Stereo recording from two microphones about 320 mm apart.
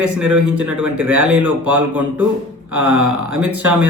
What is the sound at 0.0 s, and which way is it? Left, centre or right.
Speech, right.